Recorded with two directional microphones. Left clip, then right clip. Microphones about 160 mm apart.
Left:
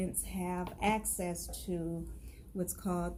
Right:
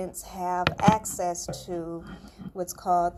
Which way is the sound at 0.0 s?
20° right (ahead or behind).